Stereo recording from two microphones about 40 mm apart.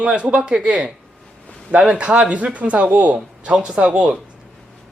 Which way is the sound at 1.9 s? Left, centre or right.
Right.